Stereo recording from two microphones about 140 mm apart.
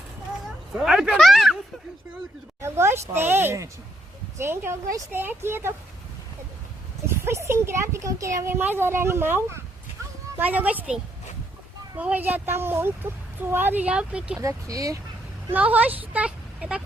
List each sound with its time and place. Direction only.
0.7 s speech: 5° right (ahead or behind)
2.6 s a child's voice: 20° right (ahead or behind)
7.1 s a child's voice: 20° right (ahead or behind)
14.3 s speech: 25° right (ahead or behind)
15.5 s a woman's voice: 10° right (ahead or behind)